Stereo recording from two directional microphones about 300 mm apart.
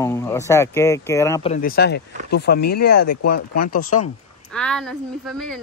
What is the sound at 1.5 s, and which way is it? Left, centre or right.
Speech, left.